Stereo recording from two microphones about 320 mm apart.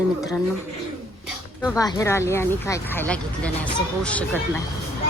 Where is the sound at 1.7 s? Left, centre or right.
Centre.